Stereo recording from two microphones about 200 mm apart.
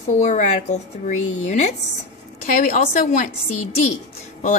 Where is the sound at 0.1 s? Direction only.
35° left (ahead or behind).